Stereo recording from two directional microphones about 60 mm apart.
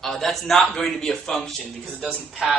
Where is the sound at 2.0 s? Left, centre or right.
Centre.